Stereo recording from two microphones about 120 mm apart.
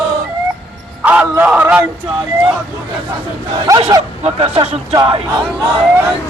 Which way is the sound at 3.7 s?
30° right (ahead or behind).